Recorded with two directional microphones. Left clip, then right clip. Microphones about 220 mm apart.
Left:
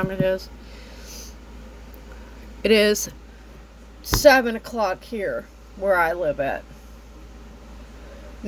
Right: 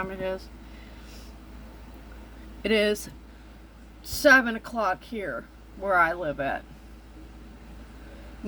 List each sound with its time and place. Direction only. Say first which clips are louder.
0.0 s speech: left 8 dB; 20° left (ahead or behind)
2.6 s speech: left 6 dB; 20° left (ahead or behind)
4.2 s speech: left 4 dB; 10° left (ahead or behind)